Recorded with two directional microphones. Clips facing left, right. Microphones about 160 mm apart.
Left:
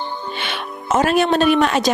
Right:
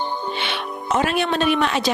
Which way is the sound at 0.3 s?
45° left (ahead or behind).